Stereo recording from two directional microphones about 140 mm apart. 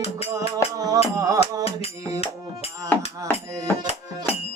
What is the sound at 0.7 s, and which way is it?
Music, 25° right (ahead or behind).